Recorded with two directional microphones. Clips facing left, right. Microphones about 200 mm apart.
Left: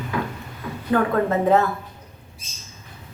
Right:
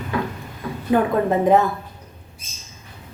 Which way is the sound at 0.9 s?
15° right (ahead or behind).